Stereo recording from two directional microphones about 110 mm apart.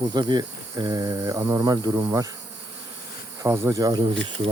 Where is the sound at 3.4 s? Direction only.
30° right (ahead or behind); by 4.5 s 45° right (ahead or behind).